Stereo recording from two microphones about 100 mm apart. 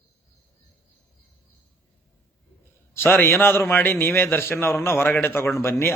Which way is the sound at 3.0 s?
20° left (ahead or behind).